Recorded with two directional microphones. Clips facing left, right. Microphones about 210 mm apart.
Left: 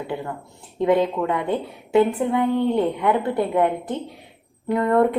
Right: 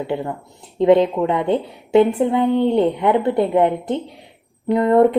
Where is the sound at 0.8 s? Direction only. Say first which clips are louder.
Right 5 dB; 25° right (ahead or behind).